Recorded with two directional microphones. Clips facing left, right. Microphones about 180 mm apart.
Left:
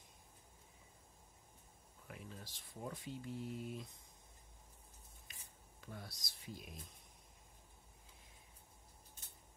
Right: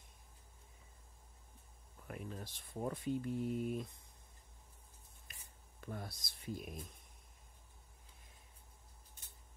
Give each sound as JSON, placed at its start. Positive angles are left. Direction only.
{"t": 2.0, "sound": "speech", "side_deg": -50}
{"t": 5.9, "sound": "speech", "side_deg": -55}